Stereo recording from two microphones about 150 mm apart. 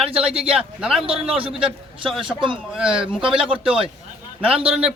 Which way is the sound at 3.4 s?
35° right (ahead or behind).